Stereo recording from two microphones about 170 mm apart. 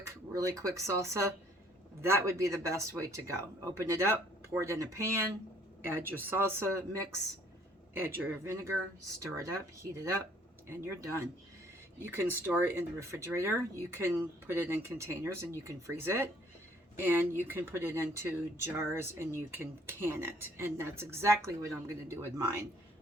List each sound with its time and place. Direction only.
0.0 s speech: 15° right (ahead or behind)
7.9 s speech: 10° right (ahead or behind)